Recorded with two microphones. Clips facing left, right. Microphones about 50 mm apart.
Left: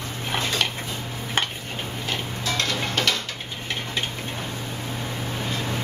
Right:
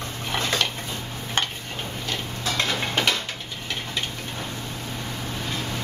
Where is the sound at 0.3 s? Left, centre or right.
Centre.